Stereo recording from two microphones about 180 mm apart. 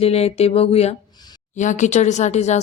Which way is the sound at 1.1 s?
25° left (ahead or behind).